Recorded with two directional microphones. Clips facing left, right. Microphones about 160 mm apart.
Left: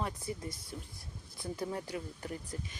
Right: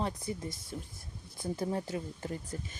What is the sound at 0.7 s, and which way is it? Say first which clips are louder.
Speech: right 3 dB; 35° right (ahead or behind).